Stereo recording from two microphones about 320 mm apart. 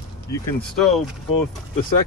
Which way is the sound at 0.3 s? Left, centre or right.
Centre.